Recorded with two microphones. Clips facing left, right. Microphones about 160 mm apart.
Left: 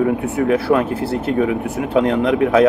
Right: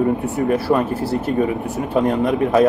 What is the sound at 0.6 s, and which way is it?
Speech, 70° left (ahead or behind).